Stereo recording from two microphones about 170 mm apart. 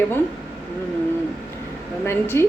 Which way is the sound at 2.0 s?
15° left (ahead or behind).